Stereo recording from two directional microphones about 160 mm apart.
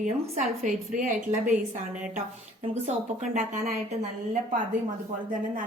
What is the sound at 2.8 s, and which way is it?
A woman's voice, 50° right (ahead or behind).